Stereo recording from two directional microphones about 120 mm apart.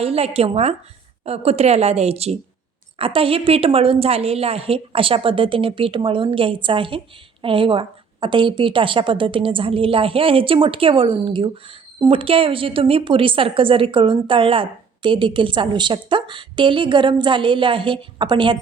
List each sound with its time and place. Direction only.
0.0 s a woman's voice: 55° right (ahead or behind)